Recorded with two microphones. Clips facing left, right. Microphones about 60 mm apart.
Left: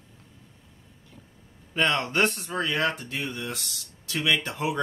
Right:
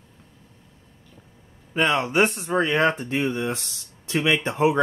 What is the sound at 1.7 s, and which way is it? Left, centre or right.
Speech, centre.